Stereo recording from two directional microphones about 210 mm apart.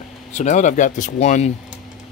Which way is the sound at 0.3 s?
35° left (ahead or behind).